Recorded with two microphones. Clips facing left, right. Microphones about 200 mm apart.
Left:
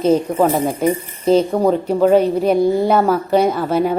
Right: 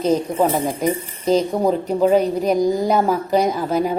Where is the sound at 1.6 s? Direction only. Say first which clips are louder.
Left 3 dB; centre (ahead or behind).